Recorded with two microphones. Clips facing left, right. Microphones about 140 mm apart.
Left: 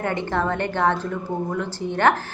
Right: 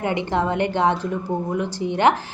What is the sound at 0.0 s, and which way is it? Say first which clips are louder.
A woman's voice: right 2 dB; 15° right (ahead or behind).